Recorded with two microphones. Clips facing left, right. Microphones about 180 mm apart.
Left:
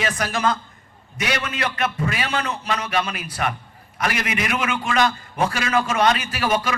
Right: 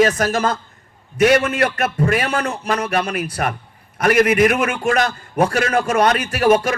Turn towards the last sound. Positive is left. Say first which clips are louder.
# right 7 dB
turn(degrees=-45)  # may be behind; listen again after turning